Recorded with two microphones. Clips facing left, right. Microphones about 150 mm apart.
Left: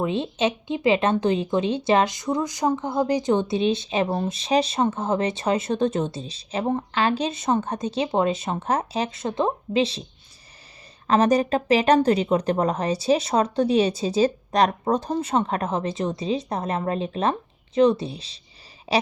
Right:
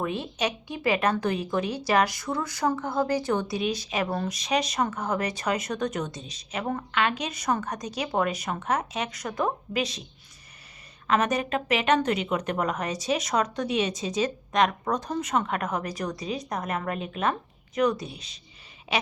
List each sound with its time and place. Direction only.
0.0 s a woman's voice: 25° left (ahead or behind)